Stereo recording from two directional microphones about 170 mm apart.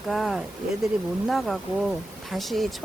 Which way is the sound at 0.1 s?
Centre (ahead or behind).